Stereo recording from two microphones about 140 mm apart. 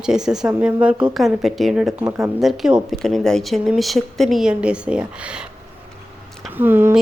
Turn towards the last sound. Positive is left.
turn(degrees=-15)  # may be behind; listen again after turning